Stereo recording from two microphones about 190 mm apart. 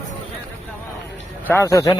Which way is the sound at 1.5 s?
15° left (ahead or behind).